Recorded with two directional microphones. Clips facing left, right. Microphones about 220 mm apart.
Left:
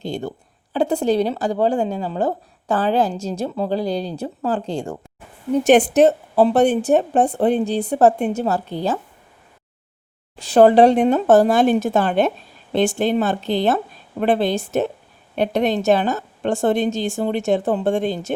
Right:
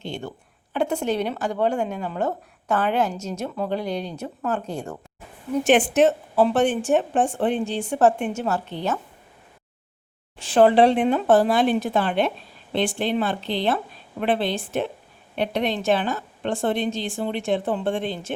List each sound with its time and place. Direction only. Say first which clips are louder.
0.0 s speech: left 6 dB; 35° left (ahead or behind)
5.6 s speech: left 4 dB; 40° left (ahead or behind)
10.3 s a woman's voice: left 4 dB; 40° left (ahead or behind)